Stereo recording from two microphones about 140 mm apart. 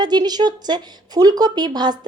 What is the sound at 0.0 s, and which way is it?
Speech, 30° right (ahead or behind).